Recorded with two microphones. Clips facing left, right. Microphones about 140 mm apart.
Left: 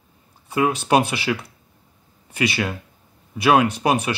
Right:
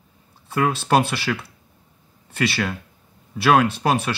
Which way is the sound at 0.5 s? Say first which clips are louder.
Left 1 dB; 15° left (ahead or behind).